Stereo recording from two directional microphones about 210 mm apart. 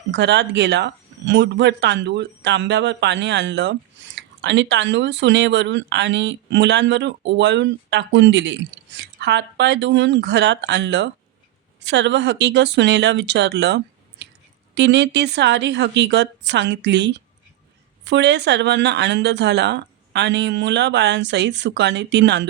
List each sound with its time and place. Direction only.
0.1 s speech: 55° right (ahead or behind)